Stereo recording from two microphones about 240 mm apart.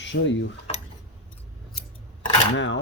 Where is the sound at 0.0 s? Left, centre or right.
Left.